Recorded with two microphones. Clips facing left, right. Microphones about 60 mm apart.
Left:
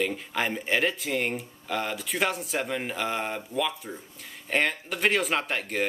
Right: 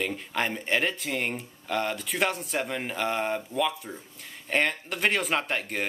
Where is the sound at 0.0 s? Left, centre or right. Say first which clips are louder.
Left 1 dB; centre.